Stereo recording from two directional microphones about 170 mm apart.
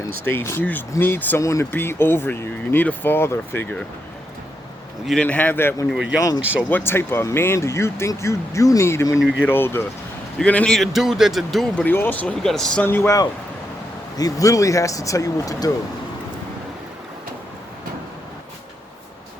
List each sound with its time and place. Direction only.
0.3 s speech: 15° left (ahead or behind)
5.0 s speech: 5° left (ahead or behind)
5.9 s speech: 5° right (ahead or behind)
6.1 s speech: 20° left (ahead or behind)